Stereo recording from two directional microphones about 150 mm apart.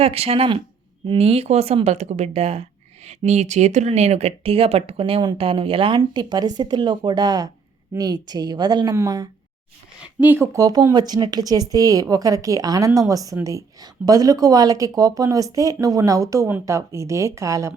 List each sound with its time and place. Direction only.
0.0 s a woman's voice: 40° right (ahead or behind); by 9.3 s 25° right (ahead or behind)
10.2 s a woman's voice: 15° right (ahead or behind)